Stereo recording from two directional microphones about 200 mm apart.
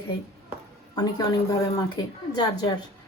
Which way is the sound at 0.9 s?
20° left (ahead or behind).